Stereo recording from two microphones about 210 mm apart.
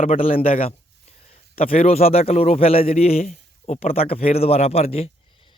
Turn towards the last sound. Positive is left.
turn(degrees=30)  # may be behind; listen again after turning